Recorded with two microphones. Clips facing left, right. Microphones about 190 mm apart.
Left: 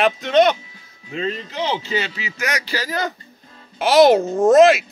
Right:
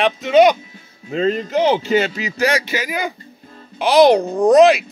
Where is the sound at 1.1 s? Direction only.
45° right (ahead or behind); by 3.2 s 15° right (ahead or behind).